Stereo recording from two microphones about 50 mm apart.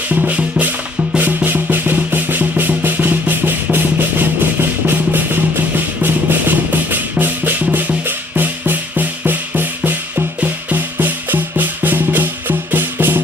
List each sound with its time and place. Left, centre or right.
0.3 s music: right